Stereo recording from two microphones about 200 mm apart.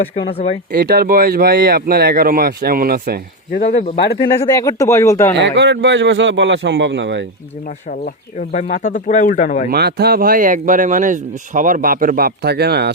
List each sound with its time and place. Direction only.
0.7 s speech: 50° right (ahead or behind)
3.5 s speech: 45° left (ahead or behind)
4.2 s speech: 15° left (ahead or behind)
5.3 s a man's voice: 60° right (ahead or behind)
7.9 s speech: 40° left (ahead or behind)
9.6 s speech: 55° right (ahead or behind)